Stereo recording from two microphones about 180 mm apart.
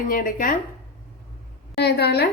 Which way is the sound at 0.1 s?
50° left (ahead or behind).